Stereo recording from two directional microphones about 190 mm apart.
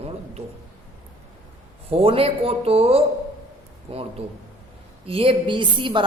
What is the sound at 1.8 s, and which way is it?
A woman's voice, 30° right (ahead or behind).